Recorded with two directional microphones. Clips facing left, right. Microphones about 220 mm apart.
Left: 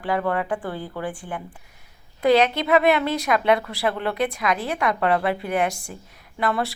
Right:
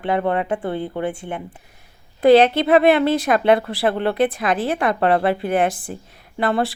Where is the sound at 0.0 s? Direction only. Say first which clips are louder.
Right 3 dB; 25° right (ahead or behind).